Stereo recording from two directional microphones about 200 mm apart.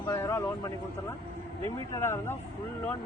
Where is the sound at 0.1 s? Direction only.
15° left (ahead or behind).